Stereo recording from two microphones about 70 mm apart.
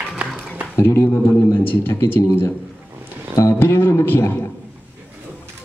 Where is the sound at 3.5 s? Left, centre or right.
Left.